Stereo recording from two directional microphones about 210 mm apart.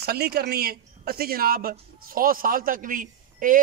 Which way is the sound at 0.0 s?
50° right (ahead or behind).